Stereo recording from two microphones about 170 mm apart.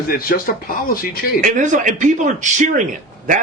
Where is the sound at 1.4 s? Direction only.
50° right (ahead or behind).